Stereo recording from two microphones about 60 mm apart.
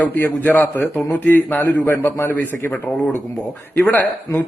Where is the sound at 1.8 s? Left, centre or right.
Left.